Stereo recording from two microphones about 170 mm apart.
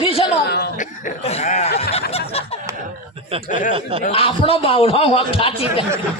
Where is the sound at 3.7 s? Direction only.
30° right (ahead or behind).